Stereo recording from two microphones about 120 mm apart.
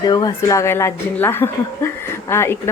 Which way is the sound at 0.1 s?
35° left (ahead or behind).